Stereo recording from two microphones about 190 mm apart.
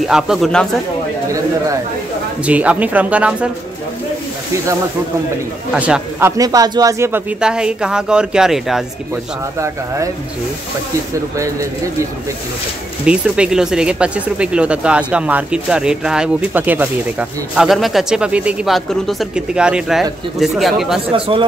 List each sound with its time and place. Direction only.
0.0 s speech: centre (ahead or behind)
2.4 s speech: 5° right (ahead or behind)
5.8 s speech: 5° right (ahead or behind)
11.3 s speech: 15° right (ahead or behind)
13.0 s speech: 5° right (ahead or behind)